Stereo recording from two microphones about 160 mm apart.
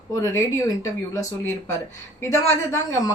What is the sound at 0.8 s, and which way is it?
A woman's voice, 15° left (ahead or behind).